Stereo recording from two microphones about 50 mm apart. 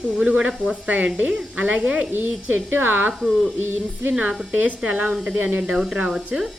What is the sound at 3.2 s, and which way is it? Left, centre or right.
Speech, centre.